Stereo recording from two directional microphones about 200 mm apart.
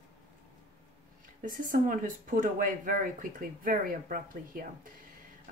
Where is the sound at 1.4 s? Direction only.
40° right (ahead or behind).